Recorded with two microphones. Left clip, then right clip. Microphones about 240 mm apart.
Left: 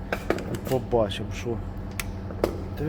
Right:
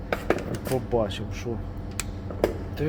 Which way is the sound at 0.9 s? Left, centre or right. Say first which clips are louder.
Left 2 dB; centre.